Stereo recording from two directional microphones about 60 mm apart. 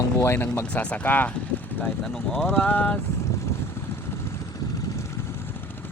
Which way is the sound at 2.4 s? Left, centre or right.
Left.